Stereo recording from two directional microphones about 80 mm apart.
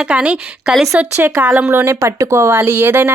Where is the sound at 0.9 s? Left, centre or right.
Right.